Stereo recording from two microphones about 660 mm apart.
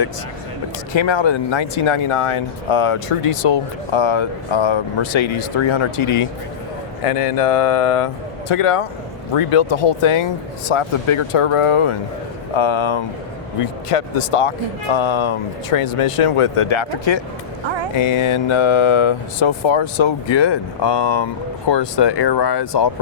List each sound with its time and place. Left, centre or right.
0.9 s speech: left